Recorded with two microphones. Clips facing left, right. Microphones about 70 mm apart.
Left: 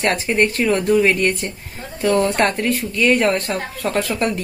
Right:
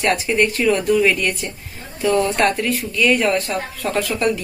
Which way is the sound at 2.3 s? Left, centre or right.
Left.